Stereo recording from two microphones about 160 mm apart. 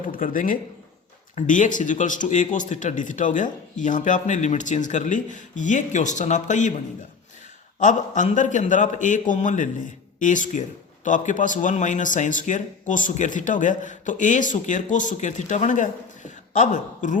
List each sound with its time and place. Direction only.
0.0 s speech: 60° left (ahead or behind)
7.8 s speech: 50° left (ahead or behind)